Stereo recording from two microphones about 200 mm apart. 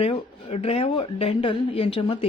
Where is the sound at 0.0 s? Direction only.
30° left (ahead or behind).